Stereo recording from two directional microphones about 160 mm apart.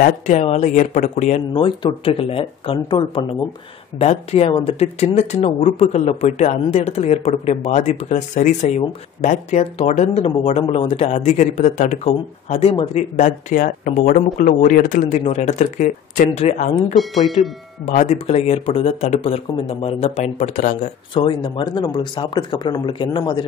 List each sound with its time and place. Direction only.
0.0 s speech: 45° left (ahead or behind)
1.5 s speech: 30° left (ahead or behind)
4.0 s speech: 40° left (ahead or behind)
21.1 s speech: 30° left (ahead or behind)